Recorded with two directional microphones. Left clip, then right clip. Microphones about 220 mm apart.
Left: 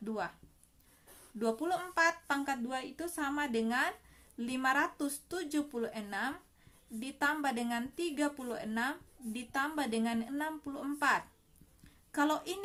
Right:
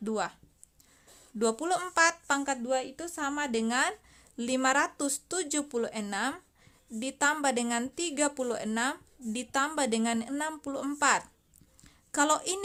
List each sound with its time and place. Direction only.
0.0 s a woman's voice: 40° right (ahead or behind)
1.4 s a woman's voice: 40° right (ahead or behind)
11.8 s a sound: 40° right (ahead or behind)